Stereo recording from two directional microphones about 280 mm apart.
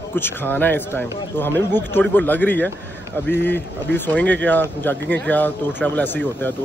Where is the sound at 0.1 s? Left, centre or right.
Centre.